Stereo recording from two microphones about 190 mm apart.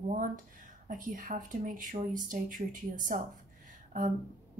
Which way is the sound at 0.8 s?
45° right (ahead or behind).